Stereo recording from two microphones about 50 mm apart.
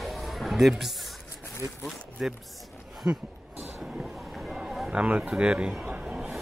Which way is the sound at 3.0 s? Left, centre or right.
Right.